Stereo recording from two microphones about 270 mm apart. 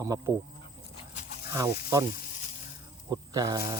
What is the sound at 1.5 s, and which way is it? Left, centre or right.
Speech, centre.